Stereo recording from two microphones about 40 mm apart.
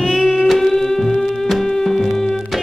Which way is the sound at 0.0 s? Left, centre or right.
Centre.